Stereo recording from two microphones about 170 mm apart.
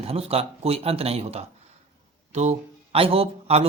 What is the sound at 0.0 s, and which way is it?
A man's voice, 35° right (ahead or behind).